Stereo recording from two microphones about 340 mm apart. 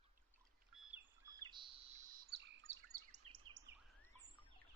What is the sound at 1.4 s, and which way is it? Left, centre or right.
Bird vocalization, centre.